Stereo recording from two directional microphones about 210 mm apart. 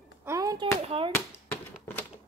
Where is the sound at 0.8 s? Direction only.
25° right (ahead or behind).